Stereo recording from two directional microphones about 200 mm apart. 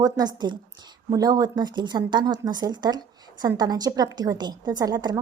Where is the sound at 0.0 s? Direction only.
20° right (ahead or behind).